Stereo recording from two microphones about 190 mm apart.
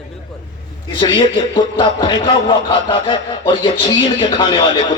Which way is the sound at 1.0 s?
25° left (ahead or behind).